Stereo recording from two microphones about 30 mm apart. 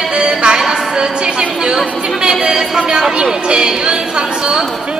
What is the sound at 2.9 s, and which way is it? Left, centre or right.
A woman's voice, right.